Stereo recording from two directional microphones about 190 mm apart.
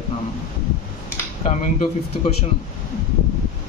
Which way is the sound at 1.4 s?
35° left (ahead or behind).